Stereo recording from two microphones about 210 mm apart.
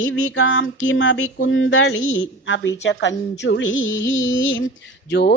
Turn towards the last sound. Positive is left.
turn(degrees=50)  # may be behind; listen again after turning